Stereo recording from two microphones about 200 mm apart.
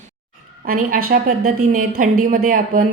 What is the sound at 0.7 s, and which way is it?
Speech, 45° right (ahead or behind).